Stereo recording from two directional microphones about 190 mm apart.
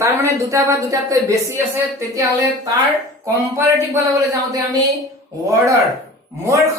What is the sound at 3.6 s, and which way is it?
Speech, 15° right (ahead or behind).